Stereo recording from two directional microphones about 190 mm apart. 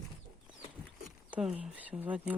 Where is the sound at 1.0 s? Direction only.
5° right (ahead or behind).